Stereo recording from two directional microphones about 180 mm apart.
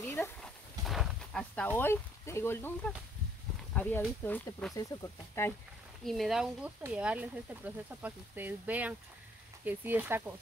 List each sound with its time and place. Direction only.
0.0 s a sound: 10° left (ahead or behind)
0.8 s speech: centre (ahead or behind)
4.7 s speech: 15° left (ahead or behind)
6.0 s speech: centre (ahead or behind)